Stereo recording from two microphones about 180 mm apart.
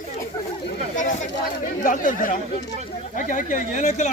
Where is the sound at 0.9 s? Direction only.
45° left (ahead or behind).